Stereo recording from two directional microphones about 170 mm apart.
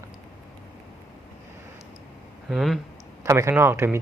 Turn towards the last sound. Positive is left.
turn(degrees=-15)  # may be behind; listen again after turning